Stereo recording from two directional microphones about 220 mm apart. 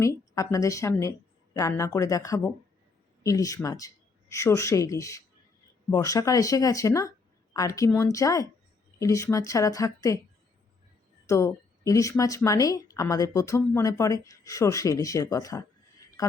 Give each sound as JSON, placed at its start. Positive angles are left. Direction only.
{"t": 0.0, "sound": "speech", "side_deg": 15}
{"t": 11.3, "sound": "speech", "side_deg": 15}